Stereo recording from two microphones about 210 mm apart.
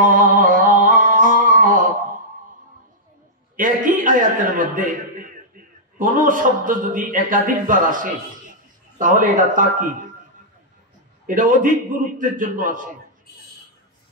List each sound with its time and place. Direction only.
0.0 s a sound: 40° right (ahead or behind)
3.5 s chuckle: 40° right (ahead or behind)
5.9 s a man's voice: 40° right (ahead or behind)
11.2 s a man's voice: 40° right (ahead or behind)